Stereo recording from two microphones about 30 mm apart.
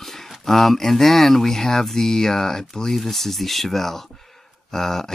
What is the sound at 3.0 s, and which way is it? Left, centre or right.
Speech, centre.